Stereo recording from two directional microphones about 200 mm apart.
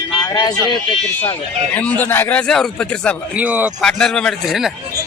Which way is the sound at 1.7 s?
10° left (ahead or behind).